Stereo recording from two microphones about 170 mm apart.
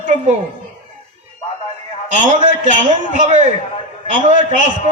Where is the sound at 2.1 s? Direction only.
45° right (ahead or behind).